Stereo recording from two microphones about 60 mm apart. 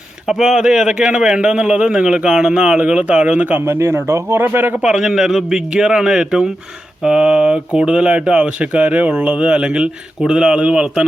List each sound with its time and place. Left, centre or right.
0.3 s speech: centre; by 3.6 s right
3.7 s speech: right
4.4 s a man's voice: right
4.8 s speech: centre